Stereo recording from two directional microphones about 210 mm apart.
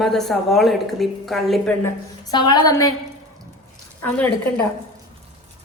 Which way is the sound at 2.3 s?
20° left (ahead or behind).